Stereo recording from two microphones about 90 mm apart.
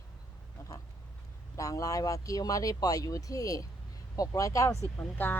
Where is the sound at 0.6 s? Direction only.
35° left (ahead or behind).